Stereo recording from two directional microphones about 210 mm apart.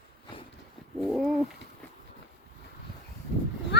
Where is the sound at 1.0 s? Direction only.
Centre (ahead or behind).